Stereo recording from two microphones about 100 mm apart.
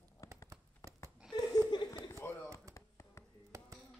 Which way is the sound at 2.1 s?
25° left (ahead or behind).